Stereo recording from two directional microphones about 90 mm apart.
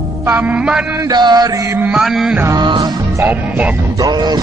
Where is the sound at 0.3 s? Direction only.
15° right (ahead or behind).